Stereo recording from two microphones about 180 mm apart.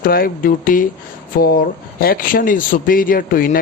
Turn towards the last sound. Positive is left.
turn(degrees=50)  # may be behind; listen again after turning